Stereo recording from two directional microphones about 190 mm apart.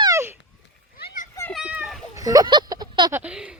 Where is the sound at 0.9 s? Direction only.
55° left (ahead or behind).